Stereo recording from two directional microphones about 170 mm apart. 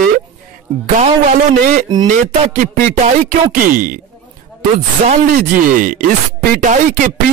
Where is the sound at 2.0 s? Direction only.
45° right (ahead or behind).